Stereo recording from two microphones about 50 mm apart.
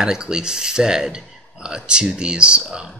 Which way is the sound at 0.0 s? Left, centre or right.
Centre.